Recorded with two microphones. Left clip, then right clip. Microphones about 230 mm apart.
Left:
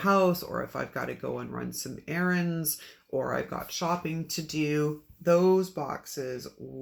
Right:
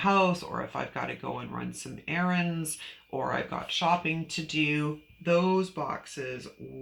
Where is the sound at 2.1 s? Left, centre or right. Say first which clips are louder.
Even; centre.